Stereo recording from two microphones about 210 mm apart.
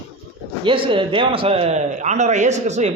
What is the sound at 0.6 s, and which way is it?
Speech, 25° right (ahead or behind).